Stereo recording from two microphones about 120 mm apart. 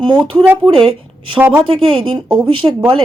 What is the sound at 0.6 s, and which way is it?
A woman's voice, 50° right (ahead or behind).